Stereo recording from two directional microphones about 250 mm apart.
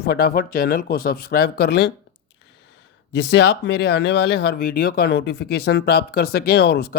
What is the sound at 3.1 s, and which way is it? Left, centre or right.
Speech, left.